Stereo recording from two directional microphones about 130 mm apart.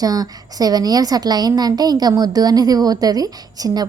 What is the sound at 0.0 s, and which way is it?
A woman's voice, 30° right (ahead or behind).